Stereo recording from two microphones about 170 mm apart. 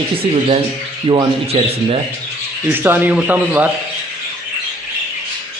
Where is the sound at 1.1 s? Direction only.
35° right (ahead or behind).